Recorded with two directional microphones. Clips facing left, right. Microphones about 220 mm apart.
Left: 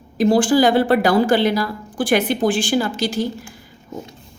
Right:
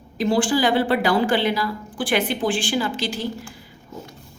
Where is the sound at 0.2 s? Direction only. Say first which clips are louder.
Left 5 dB; 45° left (ahead or behind).